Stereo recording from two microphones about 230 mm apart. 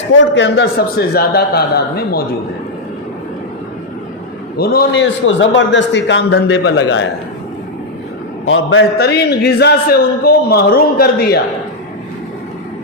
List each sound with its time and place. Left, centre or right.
0.2 s a man's voice: left
4.5 s a man's voice: left
8.4 s a man's voice: left